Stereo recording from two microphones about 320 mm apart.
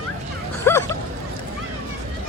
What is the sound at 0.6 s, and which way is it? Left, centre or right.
Bow-wow, centre.